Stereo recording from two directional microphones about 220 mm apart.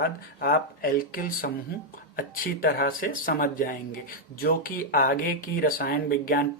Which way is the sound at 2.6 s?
40° left (ahead or behind).